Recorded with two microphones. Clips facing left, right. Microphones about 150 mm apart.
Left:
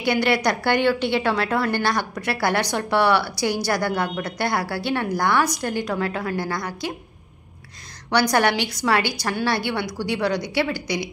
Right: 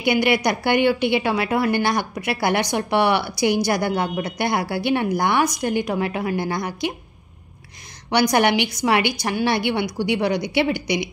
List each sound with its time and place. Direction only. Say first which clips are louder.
0.0 s a woman's voice: right 1 dB; 15° right (ahead or behind)
8.1 s a woman's voice: right 2 dB; 15° right (ahead or behind)